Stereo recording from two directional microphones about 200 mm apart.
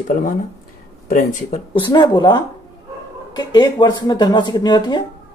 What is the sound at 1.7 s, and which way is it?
Speech, 25° left (ahead or behind).